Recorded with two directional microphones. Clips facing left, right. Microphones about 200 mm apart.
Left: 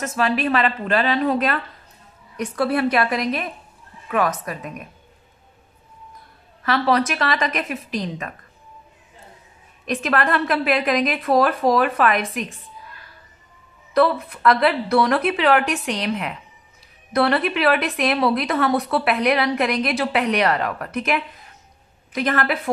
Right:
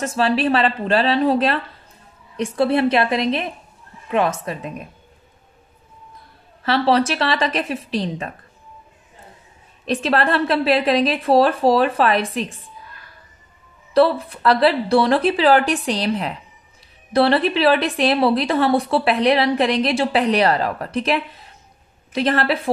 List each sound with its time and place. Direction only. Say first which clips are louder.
0.0 s a woman's voice: right 3 dB; 30° right (ahead or behind)
6.6 s a woman's voice: right 2 dB; 30° right (ahead or behind)
9.8 s a woman's voice: right 2 dB; 30° right (ahead or behind)
13.9 s a woman's voice: right 3 dB; 30° right (ahead or behind)